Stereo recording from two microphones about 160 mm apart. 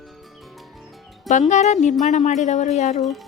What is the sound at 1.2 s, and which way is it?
Speech, 50° left (ahead or behind).